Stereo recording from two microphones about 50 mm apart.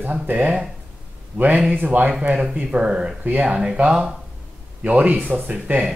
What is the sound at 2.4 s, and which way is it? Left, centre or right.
Speech, centre.